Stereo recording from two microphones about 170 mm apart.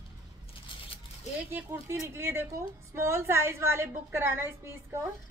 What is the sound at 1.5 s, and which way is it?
A woman's voice, 15° right (ahead or behind).